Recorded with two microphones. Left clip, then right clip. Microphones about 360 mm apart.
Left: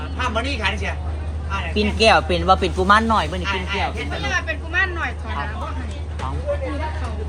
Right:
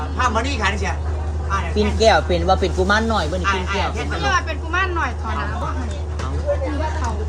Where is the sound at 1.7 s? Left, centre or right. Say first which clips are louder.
Even; left.